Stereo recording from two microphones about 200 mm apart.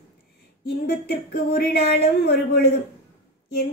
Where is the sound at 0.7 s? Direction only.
50° left (ahead or behind).